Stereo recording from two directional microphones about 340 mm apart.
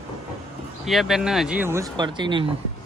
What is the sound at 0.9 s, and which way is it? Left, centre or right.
Speech, centre.